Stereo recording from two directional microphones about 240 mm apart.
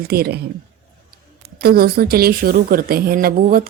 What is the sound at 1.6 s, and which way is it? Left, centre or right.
Speech, right.